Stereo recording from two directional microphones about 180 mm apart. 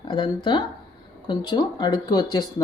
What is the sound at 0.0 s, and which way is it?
Speech, 25° left (ahead or behind).